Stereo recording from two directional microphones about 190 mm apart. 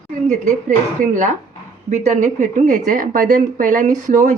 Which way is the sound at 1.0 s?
40° right (ahead or behind).